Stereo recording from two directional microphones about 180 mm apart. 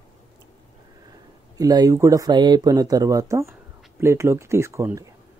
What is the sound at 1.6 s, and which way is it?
Speech, 20° right (ahead or behind).